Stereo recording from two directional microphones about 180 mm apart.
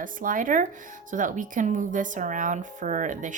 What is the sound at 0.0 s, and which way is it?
Speech, 50° right (ahead or behind).